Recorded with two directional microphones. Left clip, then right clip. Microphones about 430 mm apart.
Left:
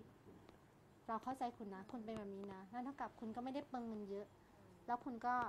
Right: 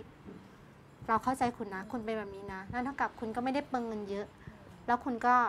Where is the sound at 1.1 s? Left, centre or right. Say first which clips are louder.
Right 14 dB; right.